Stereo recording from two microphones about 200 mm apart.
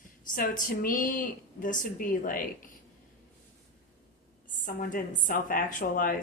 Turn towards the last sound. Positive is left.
turn(degrees=45)  # may be behind; listen again after turning